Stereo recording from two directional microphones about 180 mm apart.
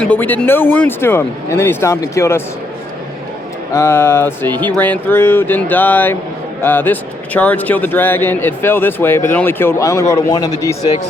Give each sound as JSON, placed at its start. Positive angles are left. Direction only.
{"t": 0.0, "sound": "a man's voice", "side_deg": 10}
{"t": 3.7, "sound": "a man's voice", "side_deg": 15}